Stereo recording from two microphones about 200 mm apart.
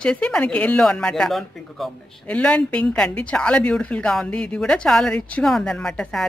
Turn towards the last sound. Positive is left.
turn(degrees=5)  # may be behind; listen again after turning